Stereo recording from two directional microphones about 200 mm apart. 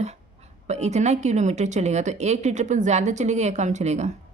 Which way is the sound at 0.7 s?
35° right (ahead or behind).